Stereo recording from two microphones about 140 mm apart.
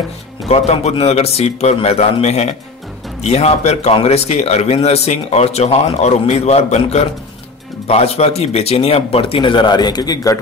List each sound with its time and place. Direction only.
0.5 s speech: 50° left (ahead or behind); by 10.4 s 25° left (ahead or behind)